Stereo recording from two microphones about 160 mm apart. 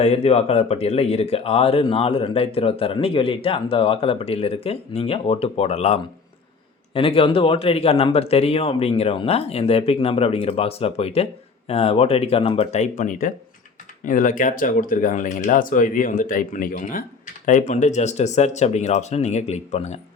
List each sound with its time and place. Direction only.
0.0 s speech: 40° left (ahead or behind)